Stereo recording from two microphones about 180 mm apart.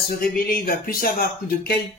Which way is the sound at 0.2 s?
55° left (ahead or behind).